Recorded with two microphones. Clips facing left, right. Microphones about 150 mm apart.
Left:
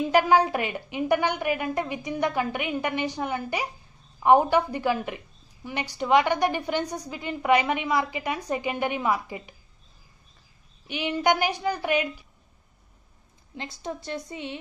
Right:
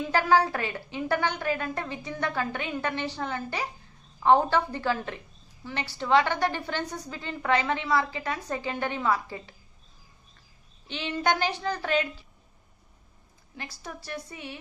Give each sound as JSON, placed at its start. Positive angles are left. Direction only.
{"t": 0.0, "sound": "a woman's voice", "side_deg": 15}
{"t": 10.9, "sound": "a woman's voice", "side_deg": 15}
{"t": 13.6, "sound": "a woman's voice", "side_deg": 25}